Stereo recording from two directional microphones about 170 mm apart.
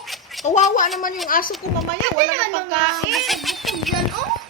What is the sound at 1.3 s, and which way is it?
Speech, 55° left (ahead or behind).